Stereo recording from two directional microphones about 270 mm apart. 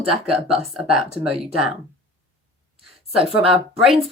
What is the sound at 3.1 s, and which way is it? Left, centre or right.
Speech, right.